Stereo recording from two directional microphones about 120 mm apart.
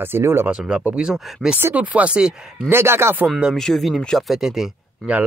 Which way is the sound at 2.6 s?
20° right (ahead or behind).